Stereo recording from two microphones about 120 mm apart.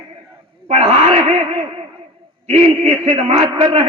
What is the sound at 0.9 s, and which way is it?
Speech, 60° right (ahead or behind).